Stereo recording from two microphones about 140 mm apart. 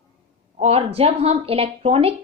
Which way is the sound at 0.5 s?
45° right (ahead or behind).